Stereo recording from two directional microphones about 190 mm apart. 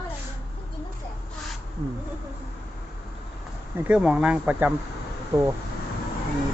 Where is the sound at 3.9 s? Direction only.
5° right (ahead or behind).